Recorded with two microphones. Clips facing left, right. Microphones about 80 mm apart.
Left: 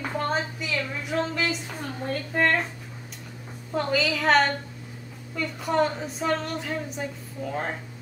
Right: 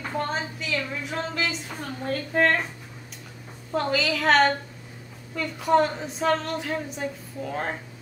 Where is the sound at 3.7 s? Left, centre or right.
Centre.